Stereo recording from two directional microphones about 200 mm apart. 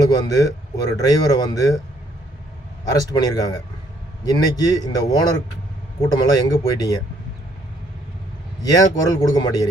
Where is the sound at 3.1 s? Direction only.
20° left (ahead or behind).